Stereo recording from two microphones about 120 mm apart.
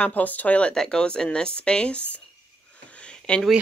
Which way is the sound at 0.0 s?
15° left (ahead or behind).